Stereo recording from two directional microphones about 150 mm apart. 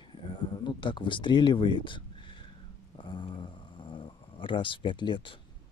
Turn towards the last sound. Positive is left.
turn(degrees=35)  # may be behind; listen again after turning